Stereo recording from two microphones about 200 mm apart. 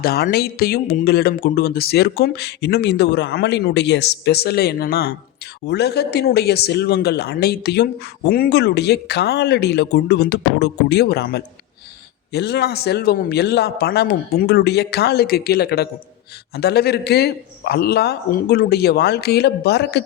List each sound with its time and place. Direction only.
0.0 s speech: 50° left (ahead or behind)